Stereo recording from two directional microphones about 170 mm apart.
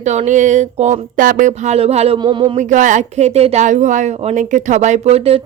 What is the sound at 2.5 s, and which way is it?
Speech, 45° right (ahead or behind).